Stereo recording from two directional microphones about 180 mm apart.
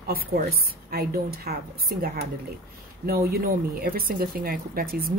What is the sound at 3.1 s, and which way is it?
A woman's voice, 55° right (ahead or behind).